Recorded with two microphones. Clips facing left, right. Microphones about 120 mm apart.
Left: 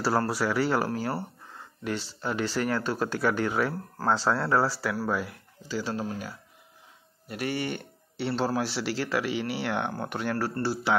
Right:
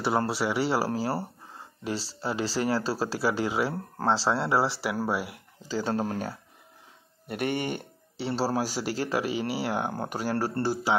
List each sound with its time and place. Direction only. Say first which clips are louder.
0.0 s speech: even; 20° right (ahead or behind)
5.7 s speech: right 3 dB; 40° right (ahead or behind)
8.4 s speech: right 1 dB; 35° right (ahead or behind)
10.6 s speech: right 1 dB; 45° right (ahead or behind)